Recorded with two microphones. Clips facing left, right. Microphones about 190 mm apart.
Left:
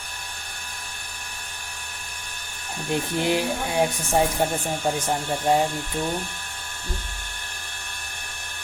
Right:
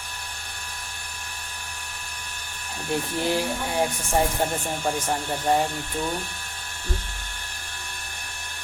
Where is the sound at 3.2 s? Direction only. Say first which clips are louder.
Left 2 dB; 20° left (ahead or behind).